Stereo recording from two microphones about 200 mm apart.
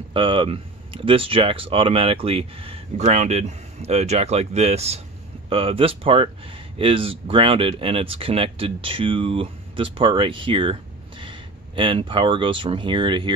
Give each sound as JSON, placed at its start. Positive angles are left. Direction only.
{"t": 0.1, "sound": "speech", "side_deg": -25}